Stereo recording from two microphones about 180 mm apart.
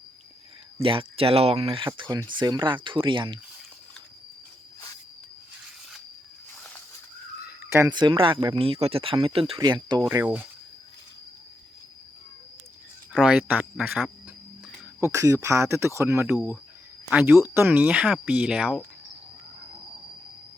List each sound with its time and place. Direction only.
0.8 s speech: 30° right (ahead or behind)
7.4 s speech: 15° right (ahead or behind)
10.1 s speech: 10° right (ahead or behind)
13.1 s speech: 5° right (ahead or behind)
15.0 s speech: 15° right (ahead or behind)